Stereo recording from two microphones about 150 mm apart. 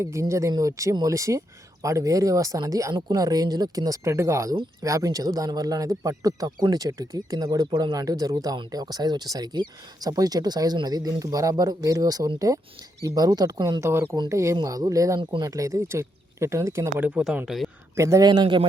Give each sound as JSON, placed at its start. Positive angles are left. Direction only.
{"t": 0.0, "sound": "speech", "side_deg": -20}
{"t": 15.2, "sound": "speech", "side_deg": -35}
{"t": 15.4, "sound": "speech", "side_deg": -20}
{"t": 17.0, "sound": "speech", "side_deg": -5}
{"t": 17.9, "sound": "speech", "side_deg": -20}